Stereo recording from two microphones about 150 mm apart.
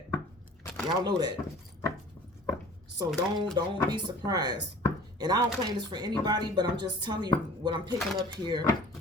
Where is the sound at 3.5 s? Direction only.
25° right (ahead or behind).